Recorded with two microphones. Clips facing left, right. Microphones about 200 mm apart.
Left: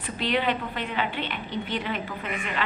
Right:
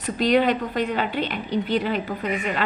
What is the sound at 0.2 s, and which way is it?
A woman's voice, 40° right (ahead or behind).